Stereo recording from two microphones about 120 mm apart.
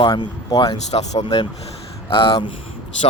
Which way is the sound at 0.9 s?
65° left (ahead or behind).